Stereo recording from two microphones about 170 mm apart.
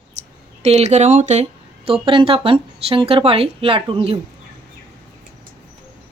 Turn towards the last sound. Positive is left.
turn(degrees=-35)  # may be behind; listen again after turning